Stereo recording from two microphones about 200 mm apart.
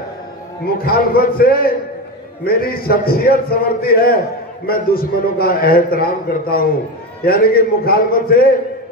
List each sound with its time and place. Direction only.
0.7 s a man's voice: 50° left (ahead or behind)